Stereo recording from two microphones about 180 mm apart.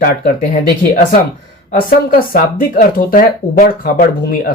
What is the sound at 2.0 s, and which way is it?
Speech, 50° left (ahead or behind).